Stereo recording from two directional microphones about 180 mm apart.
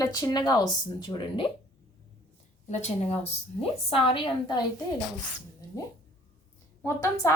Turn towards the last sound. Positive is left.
turn(degrees=15)  # may be behind; listen again after turning